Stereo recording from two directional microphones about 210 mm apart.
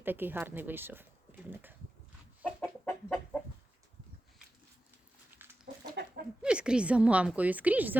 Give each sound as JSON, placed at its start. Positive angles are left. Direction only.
{"t": 0.0, "sound": "speech", "side_deg": -10}
{"t": 2.4, "sound": "chicken", "side_deg": 5}
{"t": 5.3, "sound": "chicken", "side_deg": -10}
{"t": 6.0, "sound": "chicken", "side_deg": -55}
{"t": 6.4, "sound": "a woman's voice", "side_deg": -5}